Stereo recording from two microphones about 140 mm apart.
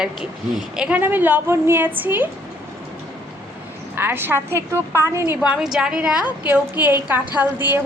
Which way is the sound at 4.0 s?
15° right (ahead or behind).